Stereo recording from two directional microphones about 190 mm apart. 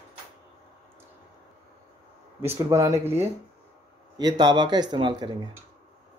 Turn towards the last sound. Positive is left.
turn(degrees=-25)  # may be behind; listen again after turning